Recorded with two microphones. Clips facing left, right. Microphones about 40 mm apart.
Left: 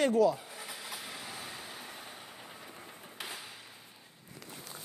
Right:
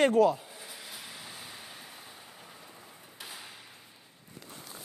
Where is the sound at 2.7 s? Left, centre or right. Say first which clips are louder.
Left 3 dB; left.